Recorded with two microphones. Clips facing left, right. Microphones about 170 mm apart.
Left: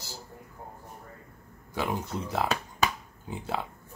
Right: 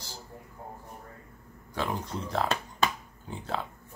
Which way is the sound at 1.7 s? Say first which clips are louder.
Left 1 dB; 5° left (ahead or behind).